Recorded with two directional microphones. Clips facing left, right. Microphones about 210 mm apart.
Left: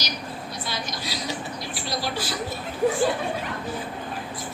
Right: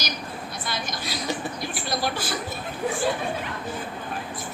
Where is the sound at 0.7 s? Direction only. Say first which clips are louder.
Right 1 dB; 50° right (ahead or behind).